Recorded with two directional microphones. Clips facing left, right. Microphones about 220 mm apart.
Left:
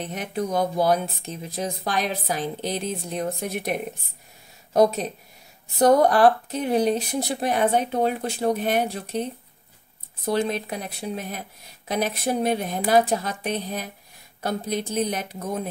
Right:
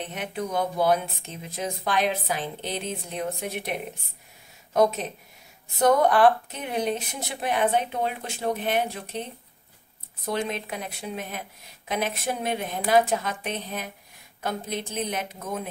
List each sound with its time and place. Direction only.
0.1 s speech: 40° left (ahead or behind)
4.7 s speech: 35° left (ahead or behind)